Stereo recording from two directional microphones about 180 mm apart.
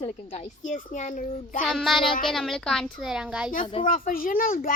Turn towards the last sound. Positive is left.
turn(degrees=50)  # may be behind; listen again after turning